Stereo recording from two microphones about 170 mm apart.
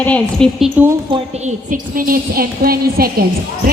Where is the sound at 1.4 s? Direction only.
55° right (ahead or behind).